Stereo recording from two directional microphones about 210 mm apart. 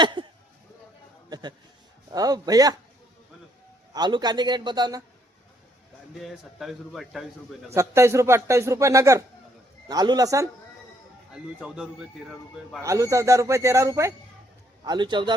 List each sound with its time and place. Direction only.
0.0 s speech: 20° right (ahead or behind)
1.3 s a man's voice: 20° right (ahead or behind)
3.9 s a man's voice: 20° right (ahead or behind)
6.2 s a man's voice: centre (ahead or behind)
7.7 s a man's voice: 15° right (ahead or behind)
11.3 s a man's voice: 5° right (ahead or behind)
12.8 s a man's voice: 15° right (ahead or behind)